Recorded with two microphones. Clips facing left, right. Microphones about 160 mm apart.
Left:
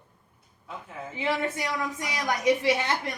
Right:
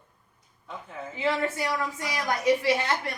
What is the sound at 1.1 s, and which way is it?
A woman's voice, 20° left (ahead or behind).